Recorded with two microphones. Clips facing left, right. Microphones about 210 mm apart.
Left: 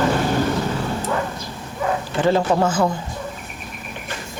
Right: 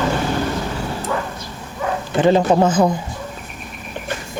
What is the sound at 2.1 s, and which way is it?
Speech, 20° right (ahead or behind).